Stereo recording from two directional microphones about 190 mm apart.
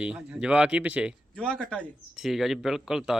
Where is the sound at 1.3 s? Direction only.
5° left (ahead or behind).